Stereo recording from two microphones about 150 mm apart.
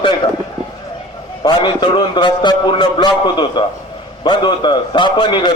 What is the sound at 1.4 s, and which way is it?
A man's voice, 30° left (ahead or behind).